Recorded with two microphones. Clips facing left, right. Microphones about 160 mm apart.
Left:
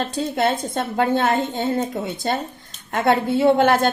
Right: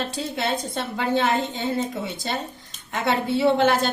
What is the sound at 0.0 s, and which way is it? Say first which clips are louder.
A woman's voice: left 6 dB; 45° left (ahead or behind).